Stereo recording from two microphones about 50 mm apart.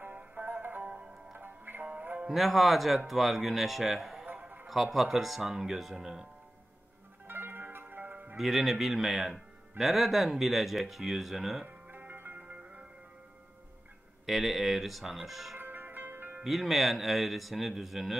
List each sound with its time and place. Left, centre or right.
0.0 s music: right
0.5 s music: right
2.2 s speech: centre
7.2 s zither: right
8.4 s speech: centre
11.9 s music: right
12.4 s music: right
14.2 s speech: centre
15.5 s music: right
16.4 s speech: centre